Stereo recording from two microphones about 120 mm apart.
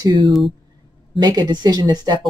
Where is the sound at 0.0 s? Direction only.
40° right (ahead or behind).